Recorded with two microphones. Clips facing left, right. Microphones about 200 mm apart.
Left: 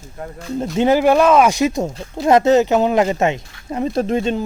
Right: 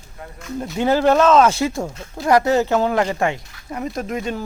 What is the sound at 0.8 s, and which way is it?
Speech, 15° left (ahead or behind).